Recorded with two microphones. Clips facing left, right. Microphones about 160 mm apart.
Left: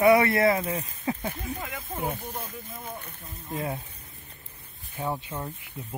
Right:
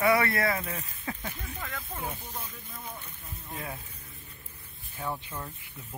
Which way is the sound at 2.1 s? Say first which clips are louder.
Left 5 dB; 50° left (ahead or behind).